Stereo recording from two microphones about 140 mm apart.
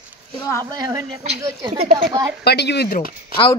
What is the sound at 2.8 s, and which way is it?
Speech, 90° left.